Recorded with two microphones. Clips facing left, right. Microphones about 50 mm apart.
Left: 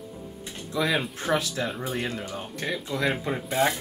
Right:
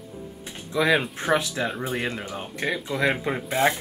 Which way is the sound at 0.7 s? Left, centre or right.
Right.